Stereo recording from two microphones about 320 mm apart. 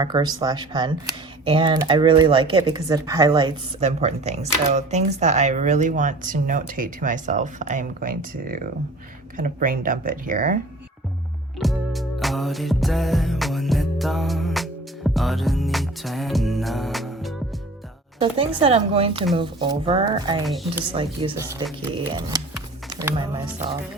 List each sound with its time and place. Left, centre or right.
0.0 s speech: centre
11.6 s music: centre
18.6 s speech: centre
20.4 s a woman's voice: centre
20.9 s speech: centre